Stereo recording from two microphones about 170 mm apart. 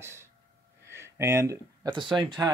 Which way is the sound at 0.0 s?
15° right (ahead or behind).